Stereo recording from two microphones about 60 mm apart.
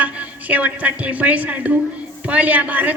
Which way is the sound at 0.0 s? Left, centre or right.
Right.